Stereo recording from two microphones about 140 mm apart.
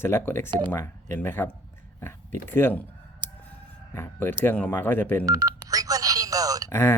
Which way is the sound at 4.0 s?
15° left (ahead or behind).